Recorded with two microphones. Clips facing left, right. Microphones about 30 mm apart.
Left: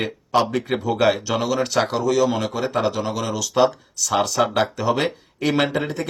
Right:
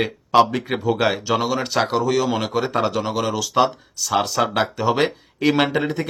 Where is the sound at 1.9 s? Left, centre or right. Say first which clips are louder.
Even; centre.